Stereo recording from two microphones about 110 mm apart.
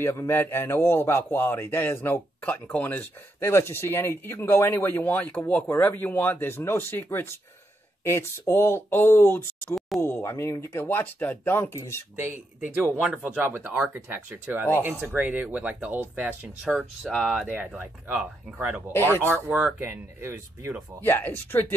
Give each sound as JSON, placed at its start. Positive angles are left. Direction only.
{"t": 0.0, "sound": "a man's voice", "side_deg": 20}
{"t": 12.2, "sound": "speech", "side_deg": -15}
{"t": 16.6, "sound": "speech", "side_deg": 0}
{"t": 17.5, "sound": "speech", "side_deg": -15}
{"t": 18.9, "sound": "a man's voice", "side_deg": 20}
{"t": 19.2, "sound": "speech", "side_deg": -20}
{"t": 21.0, "sound": "a man's voice", "side_deg": 20}